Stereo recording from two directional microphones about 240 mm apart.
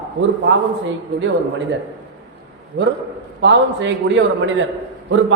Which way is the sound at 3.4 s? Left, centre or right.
Right.